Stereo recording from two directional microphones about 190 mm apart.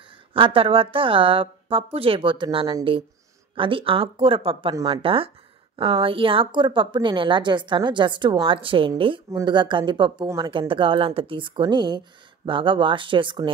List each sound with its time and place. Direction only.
0.3 s a woman's voice: 30° right (ahead or behind)